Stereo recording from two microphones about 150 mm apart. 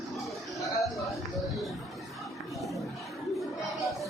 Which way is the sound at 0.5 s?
20° left (ahead or behind).